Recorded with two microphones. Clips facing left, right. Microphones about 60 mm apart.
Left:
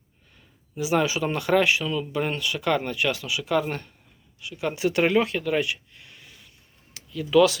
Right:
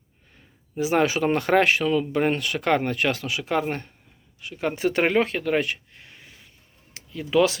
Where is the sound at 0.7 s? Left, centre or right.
Right.